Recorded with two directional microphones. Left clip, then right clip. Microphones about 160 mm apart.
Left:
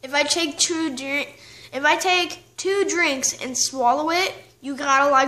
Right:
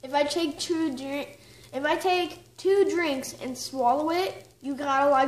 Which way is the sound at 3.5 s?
45° left (ahead or behind).